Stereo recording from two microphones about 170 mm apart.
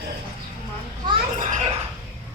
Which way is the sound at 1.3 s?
45° right (ahead or behind).